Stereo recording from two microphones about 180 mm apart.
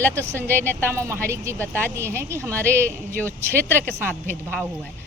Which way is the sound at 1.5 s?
10° left (ahead or behind).